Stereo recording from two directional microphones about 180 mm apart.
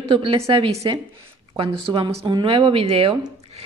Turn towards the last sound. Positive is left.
turn(degrees=-30)  # may be behind; listen again after turning